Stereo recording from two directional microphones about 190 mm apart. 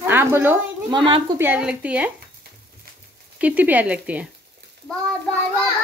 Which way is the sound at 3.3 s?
10° right (ahead or behind).